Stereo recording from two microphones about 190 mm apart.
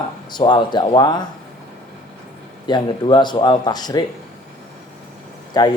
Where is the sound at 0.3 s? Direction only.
25° left (ahead or behind).